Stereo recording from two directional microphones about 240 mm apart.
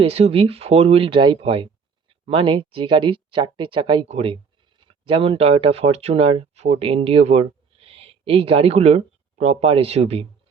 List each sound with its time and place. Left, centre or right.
0.0 s speech: right